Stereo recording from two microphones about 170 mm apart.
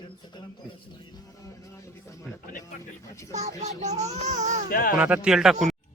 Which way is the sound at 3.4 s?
40° right (ahead or behind).